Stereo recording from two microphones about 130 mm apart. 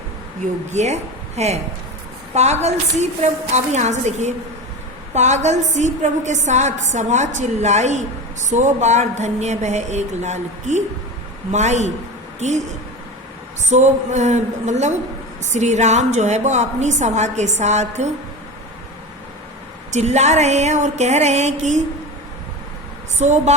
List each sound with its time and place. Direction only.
0.7 s a woman's voice: 60° right (ahead or behind)
13.7 s a woman's voice: 65° right (ahead or behind)
19.9 s a woman's voice: 60° right (ahead or behind)
23.2 s a woman's voice: 65° right (ahead or behind)